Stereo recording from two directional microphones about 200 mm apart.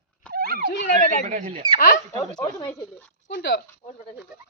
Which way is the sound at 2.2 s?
20° left (ahead or behind).